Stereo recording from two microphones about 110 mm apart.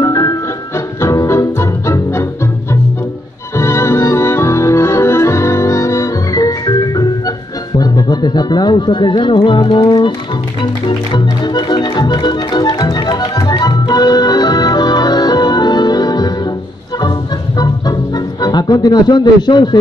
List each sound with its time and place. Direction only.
0.0 s music: 30° left (ahead or behind)
3.5 s organ: 25° left (ahead or behind); by 10.1 s 50° left (ahead or behind)
10.6 s music: 45° left (ahead or behind)
17.6 s music: 35° left (ahead or behind)